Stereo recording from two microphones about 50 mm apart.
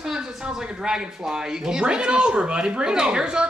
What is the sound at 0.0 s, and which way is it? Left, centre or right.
Speech, centre.